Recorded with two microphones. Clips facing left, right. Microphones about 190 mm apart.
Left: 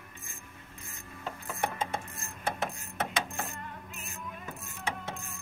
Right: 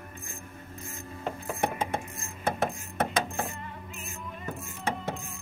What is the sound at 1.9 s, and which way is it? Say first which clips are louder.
Coin: right 4 dB; 50° right (ahead or behind).